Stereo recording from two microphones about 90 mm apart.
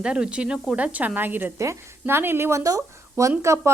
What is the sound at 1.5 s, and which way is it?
Speech, 35° right (ahead or behind).